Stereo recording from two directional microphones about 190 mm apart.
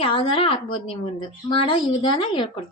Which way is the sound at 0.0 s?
25° left (ahead or behind).